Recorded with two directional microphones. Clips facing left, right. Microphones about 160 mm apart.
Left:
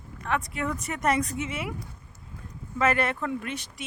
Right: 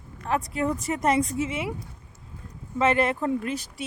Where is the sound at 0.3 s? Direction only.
35° right (ahead or behind).